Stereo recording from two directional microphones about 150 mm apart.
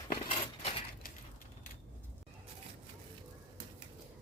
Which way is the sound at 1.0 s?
75° left (ahead or behind).